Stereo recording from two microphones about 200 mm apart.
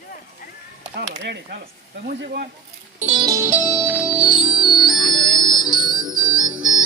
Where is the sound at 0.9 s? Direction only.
60° right (ahead or behind).